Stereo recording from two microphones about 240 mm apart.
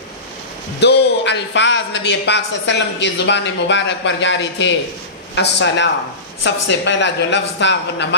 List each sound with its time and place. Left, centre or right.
0.8 s a man's voice: left